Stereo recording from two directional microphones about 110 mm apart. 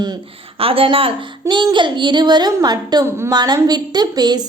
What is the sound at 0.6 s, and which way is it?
A woman's voice, 55° right (ahead or behind).